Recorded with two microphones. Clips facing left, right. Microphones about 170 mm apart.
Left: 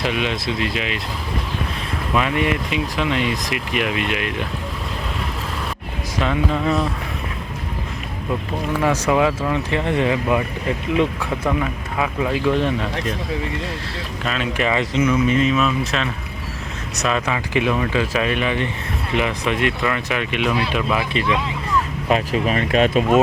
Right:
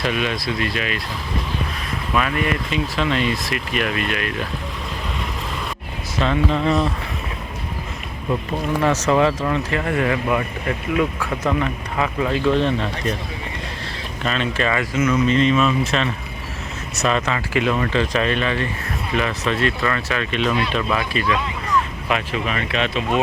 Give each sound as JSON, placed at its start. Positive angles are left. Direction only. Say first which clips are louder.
{"t": 0.0, "sound": "speech", "louder": "even", "side_deg": 20}
{"t": 2.1, "sound": "speech", "louder": "left 1 dB", "side_deg": 20}
{"t": 6.1, "sound": "speech", "louder": "right 1 dB", "side_deg": 5}
{"t": 8.8, "sound": "speech", "louder": "even", "side_deg": 10}
{"t": 9.6, "sound": "speech", "louder": "left 1 dB", "side_deg": 20}
{"t": 14.3, "sound": "speech", "louder": "even", "side_deg": 10}
{"t": 21.0, "sound": "speech", "louder": "left 1 dB", "side_deg": 20}
{"t": 22.1, "sound": "speech", "louder": "left 4 dB", "side_deg": 35}